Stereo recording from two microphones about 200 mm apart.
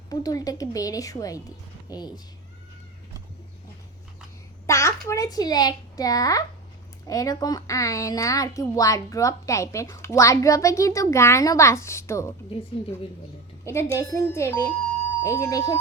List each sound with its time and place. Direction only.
0.1 s a woman's voice: 20° left (ahead or behind)
4.6 s a child's voice: 15° left (ahead or behind)
13.7 s a woman's voice: 15° left (ahead or behind)